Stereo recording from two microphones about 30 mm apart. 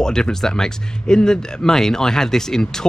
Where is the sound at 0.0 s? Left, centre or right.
Left.